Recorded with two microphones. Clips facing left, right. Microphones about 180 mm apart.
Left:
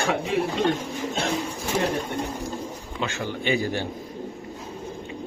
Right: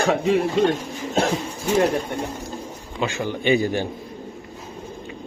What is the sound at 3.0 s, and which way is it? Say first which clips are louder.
Speech: right 5 dB; 15° right (ahead or behind).